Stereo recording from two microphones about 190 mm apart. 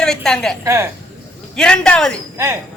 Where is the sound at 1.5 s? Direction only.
5° left (ahead or behind).